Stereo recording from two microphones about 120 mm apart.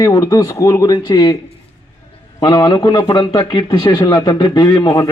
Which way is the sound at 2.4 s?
35° left (ahead or behind).